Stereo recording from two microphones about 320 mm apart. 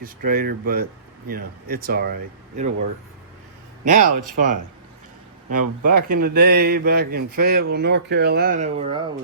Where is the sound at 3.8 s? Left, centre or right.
Right.